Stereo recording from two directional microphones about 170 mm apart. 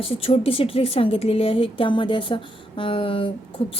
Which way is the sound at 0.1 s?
35° left (ahead or behind).